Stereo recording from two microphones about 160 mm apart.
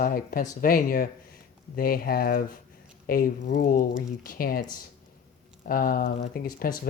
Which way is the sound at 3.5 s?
75° left (ahead or behind).